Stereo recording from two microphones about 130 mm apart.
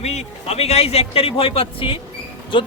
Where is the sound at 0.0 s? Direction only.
55° left (ahead or behind).